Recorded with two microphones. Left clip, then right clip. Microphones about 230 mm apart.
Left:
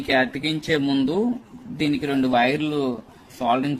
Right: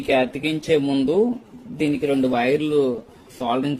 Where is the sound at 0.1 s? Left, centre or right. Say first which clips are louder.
Right 1 dB; left.